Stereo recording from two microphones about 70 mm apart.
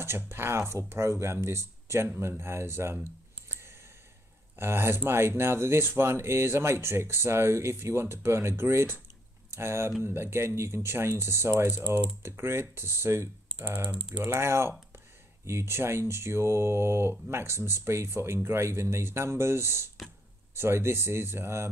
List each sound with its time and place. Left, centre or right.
0.0 s speech: right
2.4 s a sound: right
4.6 s speech: right